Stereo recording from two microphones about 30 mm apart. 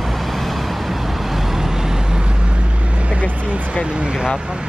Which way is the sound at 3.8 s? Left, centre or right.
Right.